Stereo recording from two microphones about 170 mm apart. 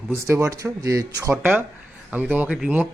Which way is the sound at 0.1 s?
15° right (ahead or behind).